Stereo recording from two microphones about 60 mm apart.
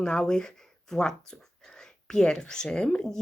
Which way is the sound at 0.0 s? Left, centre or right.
Centre.